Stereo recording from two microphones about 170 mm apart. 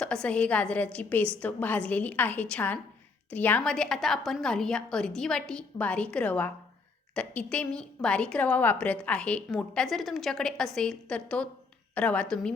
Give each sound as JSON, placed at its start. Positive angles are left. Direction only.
{"t": 0.0, "sound": "a woman's voice", "side_deg": 5}